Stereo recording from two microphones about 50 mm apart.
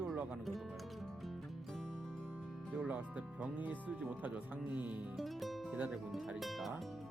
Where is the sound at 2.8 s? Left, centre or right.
Right.